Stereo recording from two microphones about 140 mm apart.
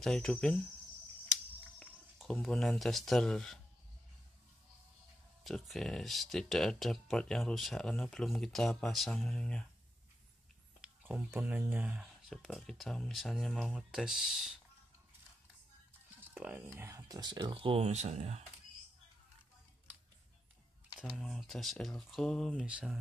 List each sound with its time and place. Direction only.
0.0 s speech: centre (ahead or behind)
1.8 s speech: 5° left (ahead or behind)
5.4 s speech: centre (ahead or behind)
10.8 s speech: 10° right (ahead or behind)
16.3 s speech: 10° right (ahead or behind); by 18.4 s 50° right (ahead or behind)
21.0 s speech: centre (ahead or behind)
22.7 s speech: 10° right (ahead or behind)